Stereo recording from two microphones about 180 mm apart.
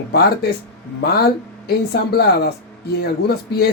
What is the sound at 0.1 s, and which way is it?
Speech, 60° left (ahead or behind).